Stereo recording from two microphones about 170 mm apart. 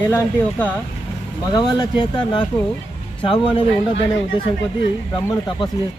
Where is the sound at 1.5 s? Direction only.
25° left (ahead or behind).